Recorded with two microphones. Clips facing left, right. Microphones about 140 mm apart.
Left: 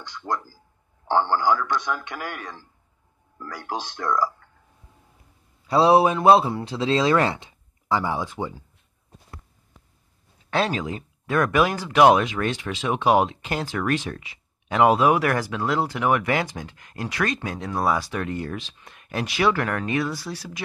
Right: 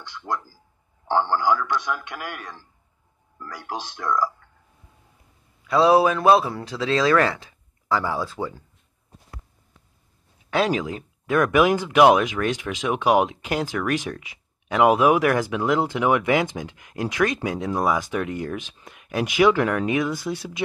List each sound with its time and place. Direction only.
0.0 s a man's voice: centre (ahead or behind)
5.6 s a man's voice: 30° left (ahead or behind)
10.5 s speech: centre (ahead or behind)
11.5 s speech: 20° right (ahead or behind)
12.0 s speech: 10° right (ahead or behind)